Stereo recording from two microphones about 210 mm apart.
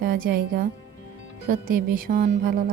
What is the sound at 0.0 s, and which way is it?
Speech, 45° right (ahead or behind).